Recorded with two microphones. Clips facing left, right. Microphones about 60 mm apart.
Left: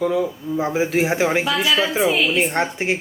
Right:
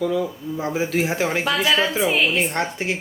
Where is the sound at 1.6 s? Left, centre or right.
Right.